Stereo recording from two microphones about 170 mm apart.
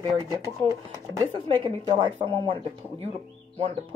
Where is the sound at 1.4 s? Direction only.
30° right (ahead or behind).